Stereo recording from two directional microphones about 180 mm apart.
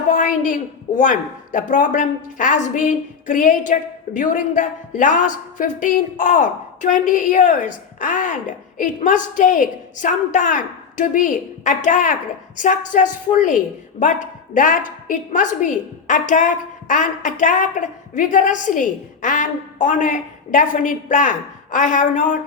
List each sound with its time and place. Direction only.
0.1 s a woman's voice: 45° left (ahead or behind)